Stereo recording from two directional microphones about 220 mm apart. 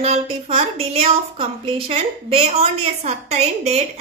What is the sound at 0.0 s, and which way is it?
A woman's voice, 30° right (ahead or behind).